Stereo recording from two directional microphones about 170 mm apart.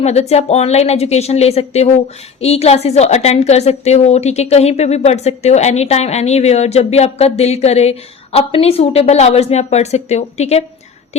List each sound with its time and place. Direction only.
0.0 s a woman's voice: 40° left (ahead or behind)